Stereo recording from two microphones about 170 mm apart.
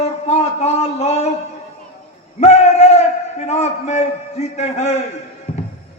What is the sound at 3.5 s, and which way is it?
A man's voice, 40° left (ahead or behind).